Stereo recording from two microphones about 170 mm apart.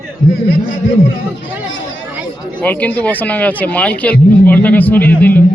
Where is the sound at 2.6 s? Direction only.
10° left (ahead or behind).